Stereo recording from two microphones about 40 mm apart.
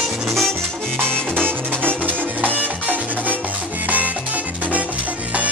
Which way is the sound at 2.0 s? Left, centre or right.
Right.